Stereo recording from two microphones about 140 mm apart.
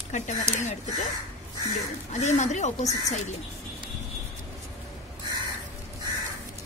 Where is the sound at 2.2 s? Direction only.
55° left (ahead or behind).